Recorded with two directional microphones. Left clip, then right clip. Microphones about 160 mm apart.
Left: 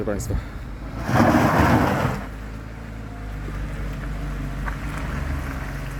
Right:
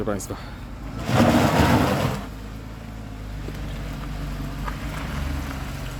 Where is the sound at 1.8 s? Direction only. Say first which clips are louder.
Left 1 dB; 15° right (ahead or behind).